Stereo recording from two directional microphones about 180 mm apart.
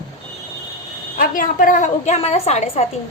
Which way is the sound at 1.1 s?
50° left (ahead or behind).